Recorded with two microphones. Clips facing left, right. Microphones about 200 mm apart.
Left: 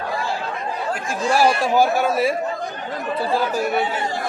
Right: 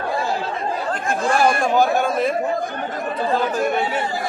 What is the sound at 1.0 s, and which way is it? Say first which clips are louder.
Speech: right 4 dB; 55° right (ahead or behind).